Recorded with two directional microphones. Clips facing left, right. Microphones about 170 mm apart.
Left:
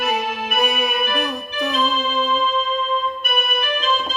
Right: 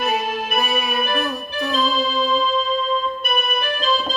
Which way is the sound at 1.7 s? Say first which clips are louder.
Right 2 dB; 35° right (ahead or behind).